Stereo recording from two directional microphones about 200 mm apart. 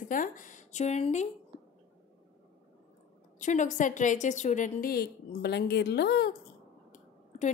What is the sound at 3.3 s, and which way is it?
A woman's voice, 40° left (ahead or behind).